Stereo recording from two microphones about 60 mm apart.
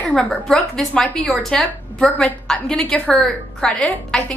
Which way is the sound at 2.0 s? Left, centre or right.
Centre.